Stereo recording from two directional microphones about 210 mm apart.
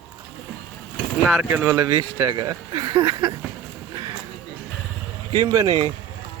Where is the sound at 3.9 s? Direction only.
20° right (ahead or behind).